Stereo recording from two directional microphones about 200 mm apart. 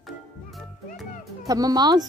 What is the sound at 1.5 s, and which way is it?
Speech, 20° right (ahead or behind).